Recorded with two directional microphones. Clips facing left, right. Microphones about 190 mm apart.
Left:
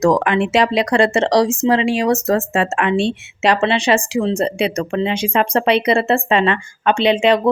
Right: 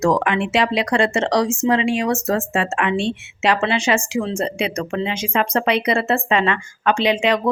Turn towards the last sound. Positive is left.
turn(degrees=30)  # may be behind; listen again after turning